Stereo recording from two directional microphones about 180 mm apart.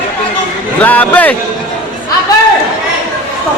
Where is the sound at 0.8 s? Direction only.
10° left (ahead or behind).